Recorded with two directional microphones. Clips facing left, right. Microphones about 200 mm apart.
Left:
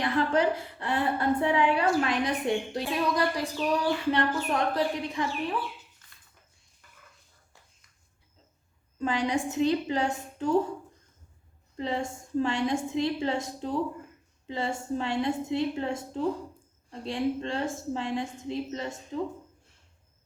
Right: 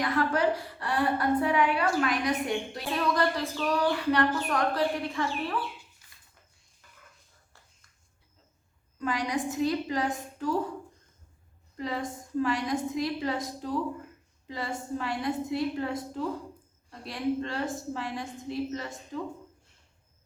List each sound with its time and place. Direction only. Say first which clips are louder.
0.0 s a woman's voice: left 1 dB; 25° left (ahead or behind)
6.0 s a sound: left 1 dB; 10° right (ahead or behind)
9.0 s a woman's voice: left 2 dB; 25° left (ahead or behind)
11.8 s a woman's voice: left 2 dB; 25° left (ahead or behind)